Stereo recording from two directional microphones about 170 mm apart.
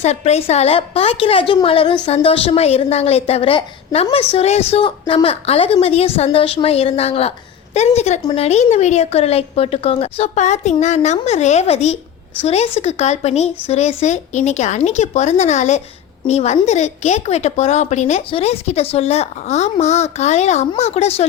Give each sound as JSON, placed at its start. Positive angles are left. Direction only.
{"t": 0.0, "sound": "a woman's voice", "side_deg": 40}